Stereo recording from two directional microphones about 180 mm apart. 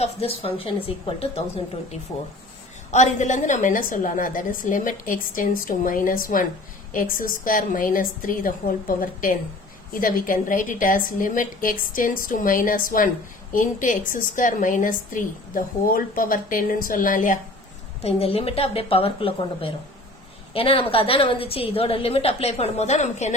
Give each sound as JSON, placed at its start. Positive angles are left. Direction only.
{"t": 0.0, "sound": "a woman's voice", "side_deg": 35}
{"t": 2.9, "sound": "a woman's voice", "side_deg": 40}
{"t": 18.0, "sound": "a woman's voice", "side_deg": 35}